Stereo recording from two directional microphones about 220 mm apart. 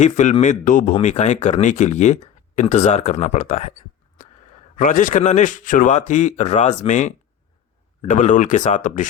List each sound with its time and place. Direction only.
0.0 s a man's voice: 30° left (ahead or behind)